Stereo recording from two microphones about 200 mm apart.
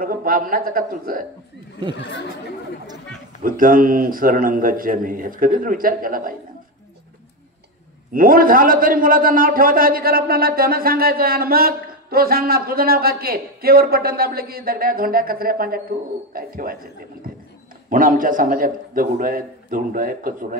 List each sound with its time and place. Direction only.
0.0 s a man's voice: 45° right (ahead or behind)
2.0 s speech: 65° left (ahead or behind)
3.4 s a man's voice: 45° right (ahead or behind)
8.1 s a man's voice: 45° right (ahead or behind)